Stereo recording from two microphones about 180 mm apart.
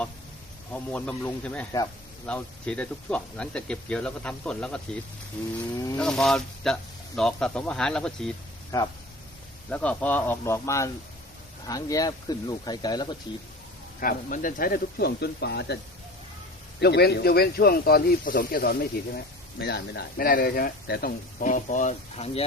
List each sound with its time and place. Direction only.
0.7 s speech: 10° left (ahead or behind)
6.0 s speech: 5° left (ahead or behind)
8.7 s speech: 15° left (ahead or behind)
14.0 s speech: 50° left (ahead or behind); by 15.8 s 65° left (ahead or behind)
16.8 s speech: 65° left (ahead or behind); by 22.4 s 40° left (ahead or behind)